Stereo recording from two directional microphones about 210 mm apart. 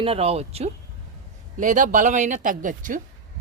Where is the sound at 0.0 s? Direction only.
30° right (ahead or behind).